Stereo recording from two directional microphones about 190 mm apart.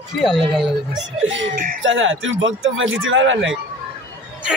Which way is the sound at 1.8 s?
85° right.